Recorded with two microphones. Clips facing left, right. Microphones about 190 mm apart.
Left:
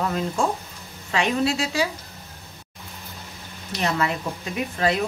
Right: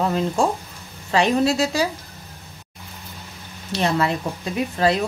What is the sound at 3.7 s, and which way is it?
A woman's voice, 30° right (ahead or behind).